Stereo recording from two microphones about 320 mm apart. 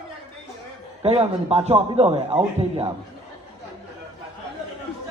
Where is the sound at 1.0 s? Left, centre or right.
Centre.